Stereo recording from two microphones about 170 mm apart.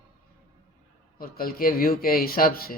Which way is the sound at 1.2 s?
60° left (ahead or behind).